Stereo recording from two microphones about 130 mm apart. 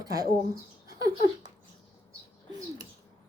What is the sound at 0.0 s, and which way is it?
Speech, 30° right (ahead or behind).